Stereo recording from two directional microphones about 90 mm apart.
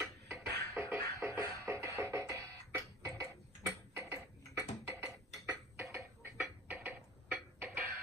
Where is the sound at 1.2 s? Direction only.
35° right (ahead or behind).